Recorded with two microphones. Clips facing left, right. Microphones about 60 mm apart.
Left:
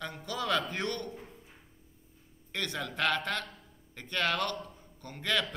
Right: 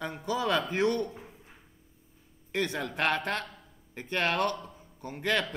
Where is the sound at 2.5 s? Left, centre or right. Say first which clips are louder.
Right 5 dB; centre.